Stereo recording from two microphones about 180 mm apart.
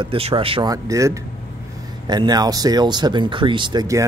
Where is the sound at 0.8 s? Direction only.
15° right (ahead or behind).